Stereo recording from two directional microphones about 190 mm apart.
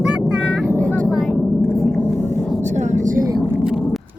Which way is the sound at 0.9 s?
5° left (ahead or behind).